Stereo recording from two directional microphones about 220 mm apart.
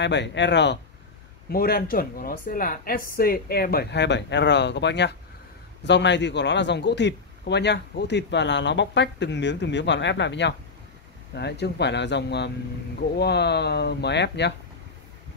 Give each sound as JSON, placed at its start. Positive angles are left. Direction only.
{"t": 0.0, "sound": "a man's voice", "side_deg": 55}